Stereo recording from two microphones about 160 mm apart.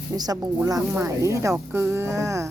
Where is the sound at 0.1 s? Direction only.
25° right (ahead or behind).